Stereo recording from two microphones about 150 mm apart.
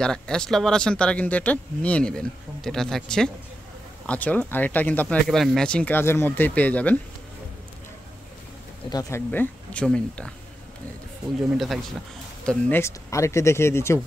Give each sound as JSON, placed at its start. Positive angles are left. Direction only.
{"t": 0.0, "sound": "speech", "side_deg": 5}
{"t": 8.9, "sound": "speech", "side_deg": 15}
{"t": 11.5, "sound": "speech", "side_deg": 0}
{"t": 12.4, "sound": "speech", "side_deg": 10}